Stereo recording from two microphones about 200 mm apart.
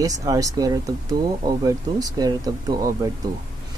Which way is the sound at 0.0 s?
15° right (ahead or behind).